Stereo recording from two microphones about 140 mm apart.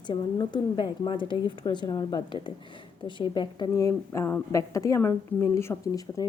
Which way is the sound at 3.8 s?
20° left (ahead or behind).